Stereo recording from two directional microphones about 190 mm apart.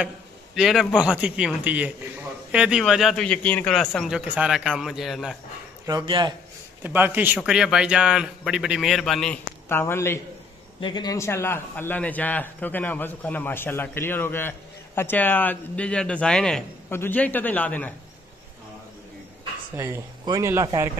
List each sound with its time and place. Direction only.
0.6 s speech: centre (ahead or behind)
5.9 s speech: 20° right (ahead or behind)
6.8 s speech: 10° right (ahead or behind); by 10.2 s 15° left (ahead or behind)
10.8 s a man's voice: 25° left (ahead or behind); by 17.9 s 10° left (ahead or behind)
19.7 s speech: 15° right (ahead or behind)